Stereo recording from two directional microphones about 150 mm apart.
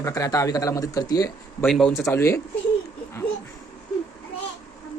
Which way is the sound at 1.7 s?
Centre (ahead or behind).